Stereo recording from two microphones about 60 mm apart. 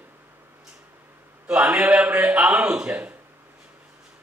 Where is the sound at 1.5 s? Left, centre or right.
Centre.